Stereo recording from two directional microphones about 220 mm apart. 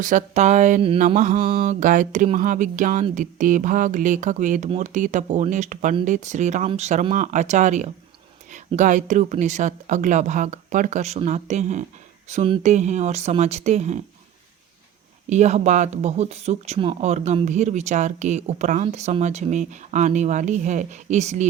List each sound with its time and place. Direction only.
0.0 s speech: 35° right (ahead or behind)
15.3 s speech: 30° right (ahead or behind)